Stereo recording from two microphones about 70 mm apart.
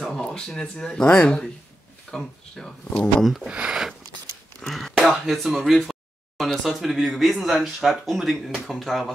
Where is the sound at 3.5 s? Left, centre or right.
Centre.